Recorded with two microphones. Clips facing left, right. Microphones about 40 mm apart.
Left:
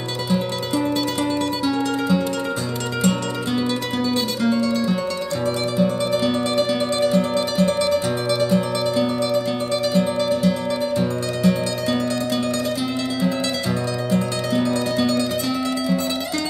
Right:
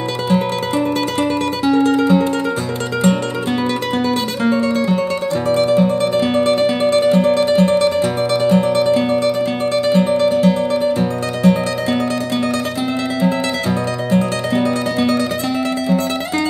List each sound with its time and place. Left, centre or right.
1.7 s music: right
4.4 s guitar: right
5.6 s music: right
14.1 s music: right